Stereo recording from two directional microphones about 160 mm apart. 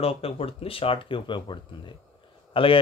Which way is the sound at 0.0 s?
35° left (ahead or behind).